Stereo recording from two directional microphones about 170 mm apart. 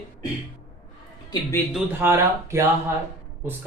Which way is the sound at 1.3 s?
15° left (ahead or behind).